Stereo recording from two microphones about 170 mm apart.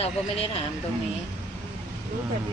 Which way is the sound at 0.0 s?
35° left (ahead or behind).